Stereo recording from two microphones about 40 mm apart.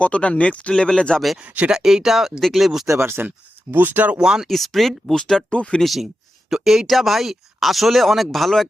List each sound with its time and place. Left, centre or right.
0.0 s speech: left
0.7 s speech: centre
1.4 s speech: right
1.7 s speech: centre
3.0 s speech: right
3.8 s speech: right
4.2 s speech: centre
4.4 s speech: centre
5.1 s speech: centre
5.8 s speech: centre